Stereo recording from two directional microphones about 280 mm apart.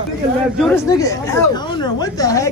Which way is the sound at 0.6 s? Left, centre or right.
Centre.